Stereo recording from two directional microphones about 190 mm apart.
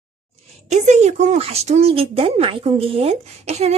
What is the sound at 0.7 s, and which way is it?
Speech, 40° right (ahead or behind).